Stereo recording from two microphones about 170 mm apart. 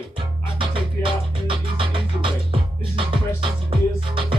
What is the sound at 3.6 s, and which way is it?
Music, 30° right (ahead or behind).